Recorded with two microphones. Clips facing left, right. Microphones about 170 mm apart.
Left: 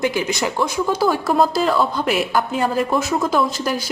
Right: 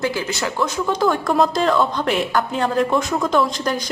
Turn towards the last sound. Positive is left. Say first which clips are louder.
# right 1 dB
turn(degrees=5)  # may be behind; listen again after turning